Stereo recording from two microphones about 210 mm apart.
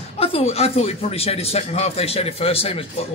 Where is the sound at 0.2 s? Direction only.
30° left (ahead or behind).